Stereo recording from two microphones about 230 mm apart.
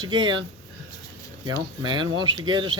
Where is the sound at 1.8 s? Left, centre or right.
Centre.